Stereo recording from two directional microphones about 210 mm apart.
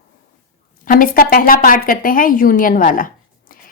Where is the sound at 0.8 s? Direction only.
40° left (ahead or behind).